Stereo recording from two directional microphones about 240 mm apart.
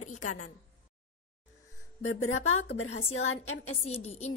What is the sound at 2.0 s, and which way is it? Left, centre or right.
A woman's voice, left.